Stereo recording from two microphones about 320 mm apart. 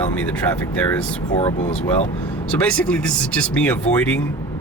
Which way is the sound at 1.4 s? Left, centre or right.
Centre.